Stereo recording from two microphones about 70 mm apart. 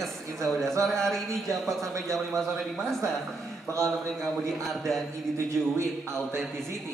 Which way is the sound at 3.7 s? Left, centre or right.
Right.